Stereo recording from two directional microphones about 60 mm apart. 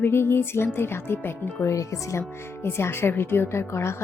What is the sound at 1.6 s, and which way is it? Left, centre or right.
Speech, left.